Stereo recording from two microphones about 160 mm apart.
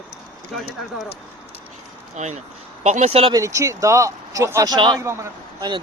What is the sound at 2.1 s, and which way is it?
Speech, 45° right (ahead or behind).